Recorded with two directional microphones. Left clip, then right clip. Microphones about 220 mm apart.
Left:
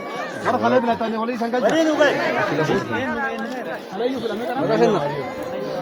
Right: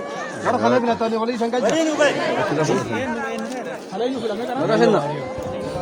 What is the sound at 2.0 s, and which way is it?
Speech, 30° right (ahead or behind).